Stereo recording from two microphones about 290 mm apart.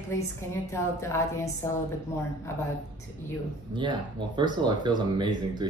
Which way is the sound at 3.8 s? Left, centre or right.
Centre.